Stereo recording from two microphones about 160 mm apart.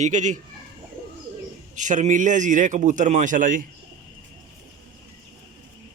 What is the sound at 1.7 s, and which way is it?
A man's voice, 50° right (ahead or behind).